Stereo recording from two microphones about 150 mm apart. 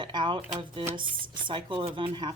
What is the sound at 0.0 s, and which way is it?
Music, 30° right (ahead or behind).